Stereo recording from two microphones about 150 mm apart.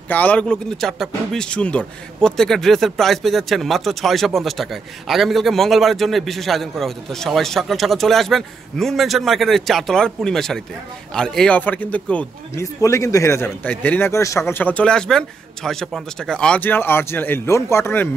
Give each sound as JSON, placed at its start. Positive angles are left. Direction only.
{"t": 0.1, "sound": "speech", "side_deg": 10}
{"t": 12.8, "sound": "a man's voice", "side_deg": 20}